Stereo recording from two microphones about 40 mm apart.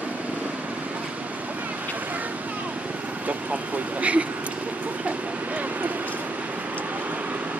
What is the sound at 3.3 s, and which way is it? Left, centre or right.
Speech, right.